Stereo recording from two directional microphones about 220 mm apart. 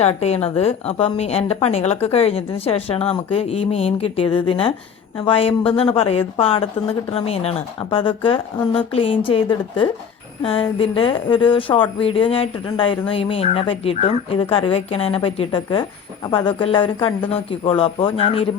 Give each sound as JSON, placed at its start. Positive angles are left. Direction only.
{"t": 0.0, "sound": "a woman's voice", "side_deg": 30}